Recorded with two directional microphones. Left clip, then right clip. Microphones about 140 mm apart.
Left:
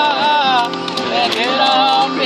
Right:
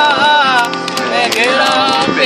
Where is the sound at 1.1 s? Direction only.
20° right (ahead or behind).